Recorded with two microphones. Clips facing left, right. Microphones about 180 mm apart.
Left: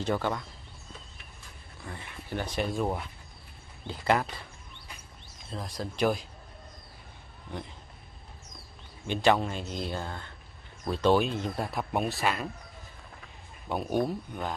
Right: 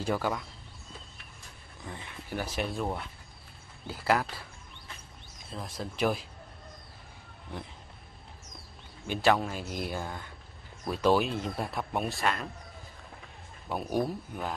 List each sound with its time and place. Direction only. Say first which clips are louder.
0.0 s speech: left 1 dB; 5° right (ahead or behind)
1.8 s a sound: even; 20° right (ahead or behind)
2.3 s speech: left 2 dB; 5° right (ahead or behind)
5.5 s speech: left 2 dB; centre (ahead or behind)
7.5 s speech: left 2 dB; centre (ahead or behind)
9.0 s speech: left 1 dB; 5° right (ahead or behind)
13.7 s speech: left 2 dB; centre (ahead or behind)